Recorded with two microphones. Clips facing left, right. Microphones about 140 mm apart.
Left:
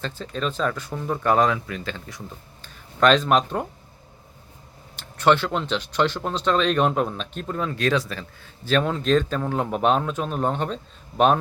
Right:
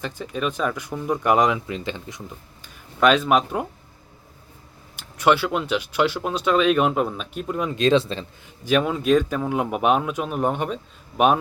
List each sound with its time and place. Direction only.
0.0 s speech: 15° right (ahead or behind)
3.0 s speech: 10° right (ahead or behind)
4.9 s speech: 10° right (ahead or behind); by 8.3 s 25° right (ahead or behind)
8.6 s speech: 10° right (ahead or behind)